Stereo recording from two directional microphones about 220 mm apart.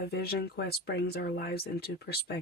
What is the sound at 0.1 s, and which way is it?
Speech, 45° left (ahead or behind).